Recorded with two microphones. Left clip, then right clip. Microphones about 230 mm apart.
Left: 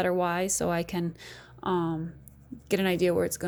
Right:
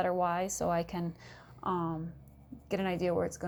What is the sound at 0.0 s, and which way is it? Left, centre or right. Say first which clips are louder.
A woman's voice: left 4 dB; left.